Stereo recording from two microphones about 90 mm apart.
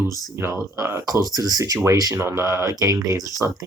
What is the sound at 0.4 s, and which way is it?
Speech, 25° right (ahead or behind).